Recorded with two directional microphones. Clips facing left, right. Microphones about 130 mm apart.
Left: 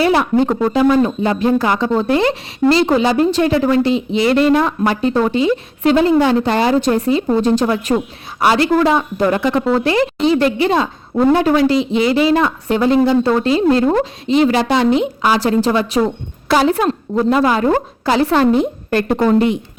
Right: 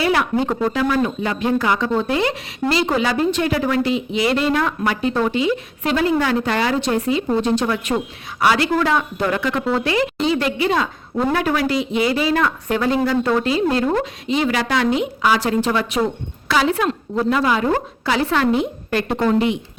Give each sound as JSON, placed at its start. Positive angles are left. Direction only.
{"t": 0.0, "sound": "a woman's voice", "side_deg": 35}
{"t": 0.8, "sound": "speech", "side_deg": 20}
{"t": 1.0, "sound": "a woman's voice", "side_deg": 30}